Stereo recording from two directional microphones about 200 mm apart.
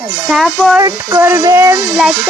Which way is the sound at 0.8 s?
15° right (ahead or behind).